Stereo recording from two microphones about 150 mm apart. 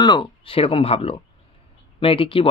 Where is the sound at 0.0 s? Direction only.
30° left (ahead or behind).